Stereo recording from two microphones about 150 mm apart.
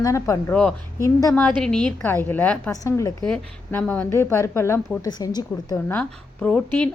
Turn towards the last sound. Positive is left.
turn(degrees=10)  # may be behind; listen again after turning